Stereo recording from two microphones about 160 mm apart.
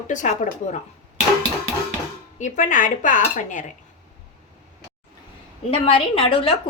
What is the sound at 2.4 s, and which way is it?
A woman's voice, 55° left (ahead or behind).